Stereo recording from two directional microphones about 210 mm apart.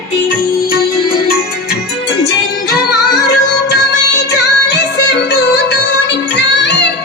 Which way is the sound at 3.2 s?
55° left (ahead or behind).